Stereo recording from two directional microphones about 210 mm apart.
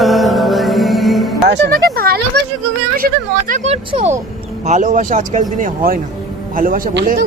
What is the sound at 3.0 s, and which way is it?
A man's voice, 40° right (ahead or behind).